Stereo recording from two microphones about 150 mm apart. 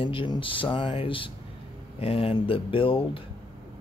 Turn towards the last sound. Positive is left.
turn(degrees=35)  # may be behind; listen again after turning